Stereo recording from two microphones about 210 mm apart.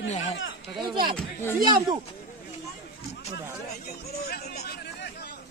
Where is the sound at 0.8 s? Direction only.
25° right (ahead or behind).